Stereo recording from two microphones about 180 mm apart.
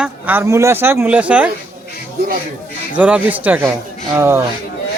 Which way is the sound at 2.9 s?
10° right (ahead or behind).